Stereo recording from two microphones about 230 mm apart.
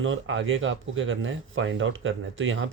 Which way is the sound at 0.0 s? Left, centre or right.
Right.